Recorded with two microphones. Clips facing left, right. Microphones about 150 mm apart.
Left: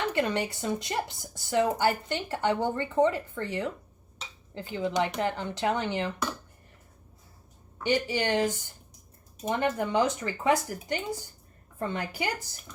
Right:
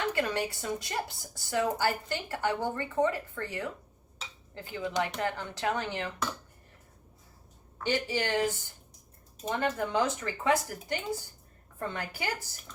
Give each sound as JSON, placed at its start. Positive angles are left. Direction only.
{"t": 0.1, "sound": "speech", "side_deg": 20}
{"t": 7.9, "sound": "speech", "side_deg": 15}